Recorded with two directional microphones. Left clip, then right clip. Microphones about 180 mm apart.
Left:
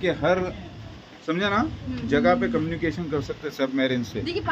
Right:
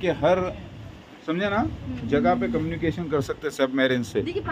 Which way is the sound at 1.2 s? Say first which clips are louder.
Left 1 dB; centre (ahead or behind).